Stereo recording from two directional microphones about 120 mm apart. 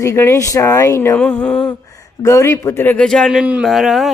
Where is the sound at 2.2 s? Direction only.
25° left (ahead or behind).